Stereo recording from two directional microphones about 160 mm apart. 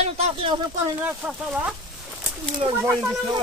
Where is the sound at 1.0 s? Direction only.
10° right (ahead or behind).